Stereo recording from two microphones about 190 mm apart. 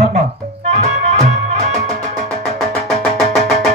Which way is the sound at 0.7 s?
35° right (ahead or behind).